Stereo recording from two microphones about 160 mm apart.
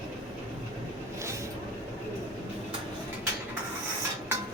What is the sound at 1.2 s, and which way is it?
Vehicle, 20° right (ahead or behind).